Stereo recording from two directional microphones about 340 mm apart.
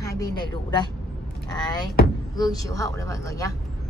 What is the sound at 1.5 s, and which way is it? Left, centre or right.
Speech, centre.